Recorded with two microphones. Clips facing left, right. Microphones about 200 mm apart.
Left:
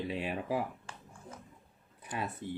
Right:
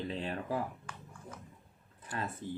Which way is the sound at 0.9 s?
25° left (ahead or behind).